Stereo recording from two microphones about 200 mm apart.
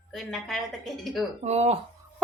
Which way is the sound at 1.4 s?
35° right (ahead or behind).